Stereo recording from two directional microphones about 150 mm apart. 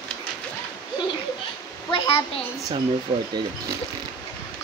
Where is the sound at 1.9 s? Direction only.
40° left (ahead or behind).